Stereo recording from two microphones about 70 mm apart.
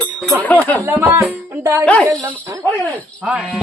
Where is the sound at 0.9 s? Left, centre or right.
Right.